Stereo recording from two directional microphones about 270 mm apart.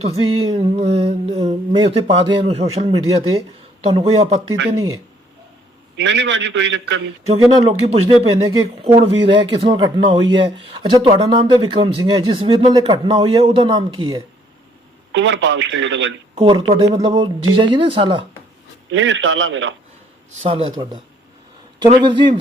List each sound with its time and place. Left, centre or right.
0.0 s a sound: centre
6.0 s a man's voice: right
8.3 s a sound: right
9.0 s speech: right
15.1 s speech: right
16.3 s speech: centre
18.9 s a man's voice: right
20.4 s a sound: right
21.8 s speech: centre